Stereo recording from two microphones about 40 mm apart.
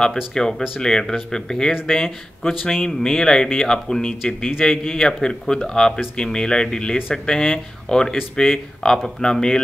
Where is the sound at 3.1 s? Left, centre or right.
Centre.